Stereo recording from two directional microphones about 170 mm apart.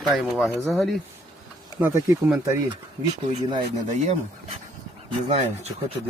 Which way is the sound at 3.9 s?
45° right (ahead or behind).